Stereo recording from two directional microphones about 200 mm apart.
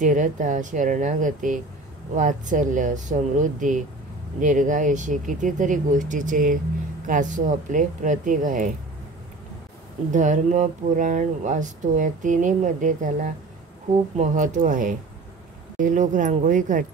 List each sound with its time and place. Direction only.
0.0 s speech: 40° right (ahead or behind)
10.1 s speech: 40° right (ahead or behind)